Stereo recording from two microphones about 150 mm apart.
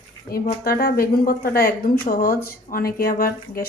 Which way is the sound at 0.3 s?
90° left.